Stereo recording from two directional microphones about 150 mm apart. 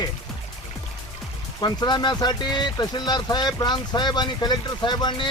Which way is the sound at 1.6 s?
30° left (ahead or behind).